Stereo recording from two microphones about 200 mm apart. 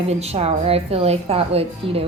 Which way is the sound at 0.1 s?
30° right (ahead or behind).